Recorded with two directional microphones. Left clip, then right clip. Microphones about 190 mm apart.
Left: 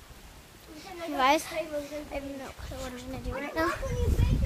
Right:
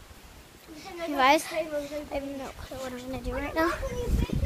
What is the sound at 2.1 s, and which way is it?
A child's voice, 20° right (ahead or behind).